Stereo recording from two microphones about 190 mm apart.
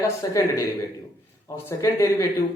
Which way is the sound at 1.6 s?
15° left (ahead or behind).